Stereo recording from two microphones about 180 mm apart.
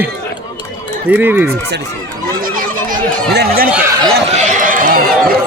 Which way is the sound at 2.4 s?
50° right (ahead or behind).